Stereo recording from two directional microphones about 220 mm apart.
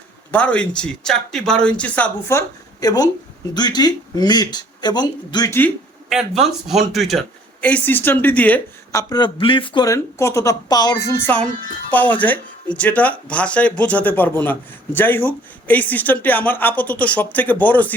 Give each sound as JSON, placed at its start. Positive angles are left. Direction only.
{"t": 0.3, "sound": "speech", "side_deg": 5}
{"t": 6.1, "sound": "speech", "side_deg": 0}